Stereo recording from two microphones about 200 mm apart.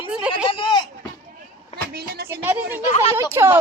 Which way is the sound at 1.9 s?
50° right (ahead or behind).